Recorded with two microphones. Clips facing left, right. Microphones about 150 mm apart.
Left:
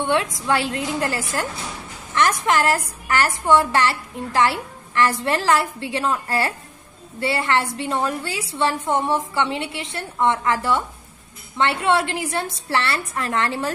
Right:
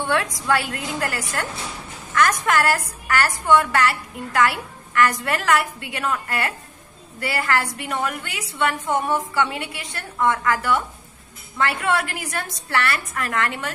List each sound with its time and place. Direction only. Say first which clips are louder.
0.0 s a woman's voice: left 2 dB; 25° left (ahead or behind)